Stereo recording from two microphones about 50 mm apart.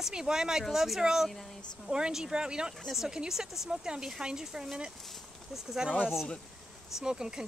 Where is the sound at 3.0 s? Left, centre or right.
Centre.